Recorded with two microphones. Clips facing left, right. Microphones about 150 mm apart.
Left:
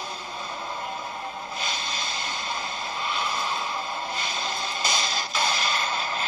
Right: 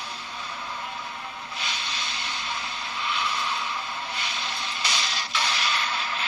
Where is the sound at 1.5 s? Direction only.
40° left (ahead or behind).